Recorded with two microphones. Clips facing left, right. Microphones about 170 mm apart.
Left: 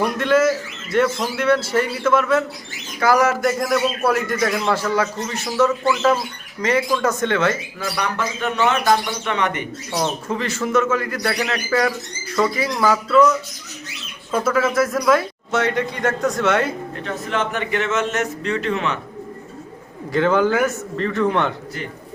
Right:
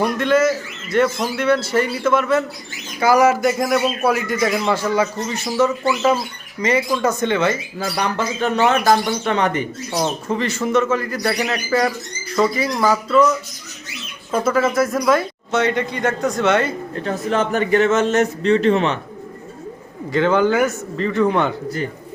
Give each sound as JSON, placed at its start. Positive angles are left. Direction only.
{"t": 0.0, "sound": "a man's voice", "side_deg": 0}
{"t": 5.8, "sound": "a man's voice", "side_deg": -10}
{"t": 7.8, "sound": "a man's voice", "side_deg": -30}
{"t": 10.2, "sound": "a man's voice", "side_deg": 0}
{"t": 14.3, "sound": "a man's voice", "side_deg": 0}
{"t": 17.0, "sound": "a man's voice", "side_deg": -35}
{"t": 20.1, "sound": "a man's voice", "side_deg": 0}